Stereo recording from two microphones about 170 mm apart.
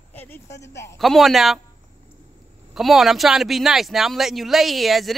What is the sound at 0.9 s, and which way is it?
Speech, centre (ahead or behind).